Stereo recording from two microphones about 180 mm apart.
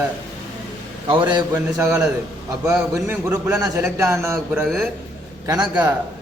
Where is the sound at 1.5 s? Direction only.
15° right (ahead or behind).